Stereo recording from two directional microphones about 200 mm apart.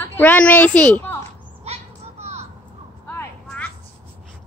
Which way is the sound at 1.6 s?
30° right (ahead or behind).